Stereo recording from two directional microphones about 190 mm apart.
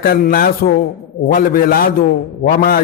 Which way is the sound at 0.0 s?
50° left (ahead or behind).